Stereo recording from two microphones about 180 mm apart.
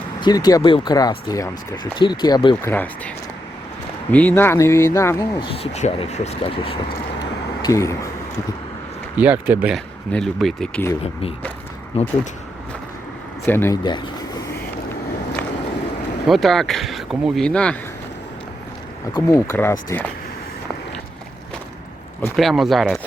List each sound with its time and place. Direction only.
0.2 s speech: 20° left (ahead or behind)
2.6 s speech: 10° left (ahead or behind)
4.1 s speech: 10° left (ahead or behind)
5.4 s speech: 35° left (ahead or behind)
7.6 s speech: 15° left (ahead or behind)
9.1 s speech: 10° right (ahead or behind)
9.7 s speech: centre (ahead or behind)
11.9 s speech: 35° left (ahead or behind)
13.4 s speech: 15° left (ahead or behind)
16.2 s speech: centre (ahead or behind)
19.1 s speech: 15° left (ahead or behind)
22.4 s speech: centre (ahead or behind)